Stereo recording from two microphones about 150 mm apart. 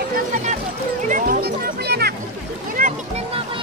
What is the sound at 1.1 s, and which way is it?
Music, 70° right (ahead or behind).